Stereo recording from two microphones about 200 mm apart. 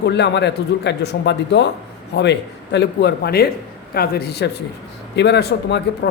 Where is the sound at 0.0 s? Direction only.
60° left (ahead or behind).